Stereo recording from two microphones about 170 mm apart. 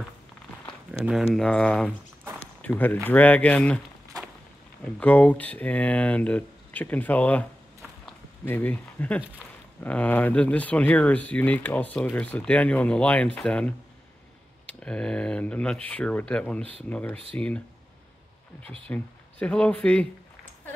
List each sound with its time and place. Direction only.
0.9 s a sound: 5° right (ahead or behind)
1.3 s speech: 5° left (ahead or behind)
4.8 s speech: 10° left (ahead or behind)
8.5 s speech: 10° left (ahead or behind)
14.8 s speech: 5° left (ahead or behind)
18.6 s speech: 35° right (ahead or behind)
18.9 s speech: 5° left (ahead or behind)